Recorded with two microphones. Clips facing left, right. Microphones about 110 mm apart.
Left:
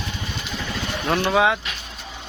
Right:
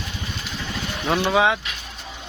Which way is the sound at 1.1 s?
Centre (ahead or behind).